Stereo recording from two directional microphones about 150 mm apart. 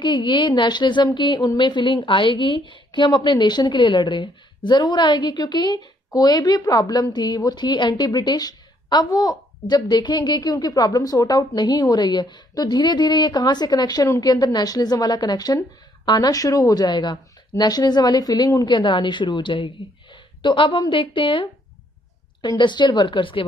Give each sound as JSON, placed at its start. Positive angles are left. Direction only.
{"t": 0.0, "sound": "a woman's voice", "side_deg": 30}